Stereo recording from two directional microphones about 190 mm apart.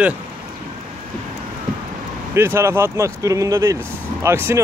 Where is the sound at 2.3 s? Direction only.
15° right (ahead or behind).